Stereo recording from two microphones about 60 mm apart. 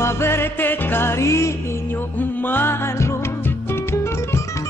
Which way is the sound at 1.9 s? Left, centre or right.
Left.